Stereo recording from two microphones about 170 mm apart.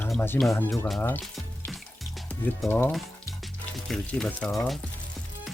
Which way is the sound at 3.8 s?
5° left (ahead or behind).